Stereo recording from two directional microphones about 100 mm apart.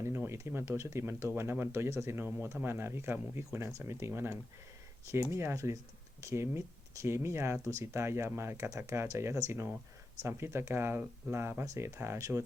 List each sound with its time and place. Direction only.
0.0 s speech: 25° right (ahead or behind)